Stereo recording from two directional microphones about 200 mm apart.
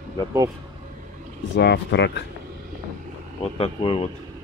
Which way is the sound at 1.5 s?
60° left (ahead or behind).